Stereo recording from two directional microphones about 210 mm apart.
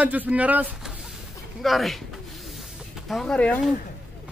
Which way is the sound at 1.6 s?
Centre (ahead or behind).